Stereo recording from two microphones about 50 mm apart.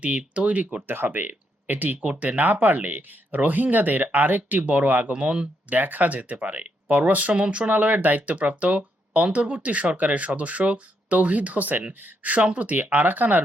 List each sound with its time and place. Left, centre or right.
0.0 s speech: right
0.9 s speech: right
5.1 s speech: right
5.6 s speech: right